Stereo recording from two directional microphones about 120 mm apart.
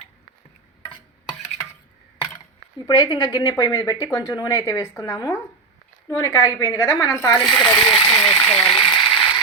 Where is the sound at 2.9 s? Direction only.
30° left (ahead or behind).